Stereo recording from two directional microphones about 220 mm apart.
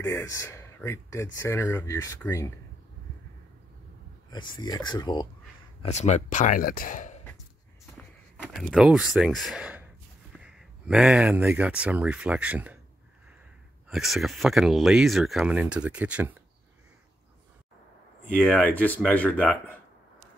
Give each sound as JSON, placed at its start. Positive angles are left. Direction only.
{"t": 0.0, "sound": "speech", "side_deg": 15}
{"t": 4.3, "sound": "speech", "side_deg": 20}
{"t": 5.8, "sound": "speech", "side_deg": 30}
{"t": 8.0, "sound": "speech", "side_deg": 5}
{"t": 13.8, "sound": "speech", "side_deg": 0}
{"t": 18.4, "sound": "speech", "side_deg": 5}